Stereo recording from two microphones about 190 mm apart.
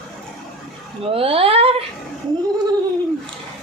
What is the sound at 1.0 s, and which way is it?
Speech, 30° right (ahead or behind).